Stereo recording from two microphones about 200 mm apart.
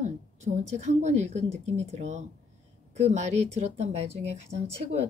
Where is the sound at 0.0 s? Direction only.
35° right (ahead or behind).